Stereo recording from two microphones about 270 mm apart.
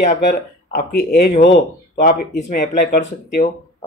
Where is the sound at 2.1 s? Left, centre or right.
Left.